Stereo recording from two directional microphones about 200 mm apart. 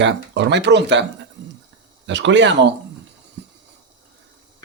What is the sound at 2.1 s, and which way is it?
Speech, 65° right (ahead or behind).